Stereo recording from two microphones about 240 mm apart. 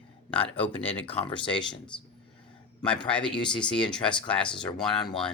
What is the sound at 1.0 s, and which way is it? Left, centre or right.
Speech, centre.